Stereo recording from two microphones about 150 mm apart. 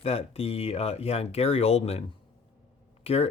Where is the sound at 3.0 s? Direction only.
40° left (ahead or behind).